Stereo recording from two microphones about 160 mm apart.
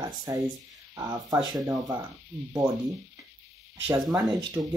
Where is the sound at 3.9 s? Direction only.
20° right (ahead or behind).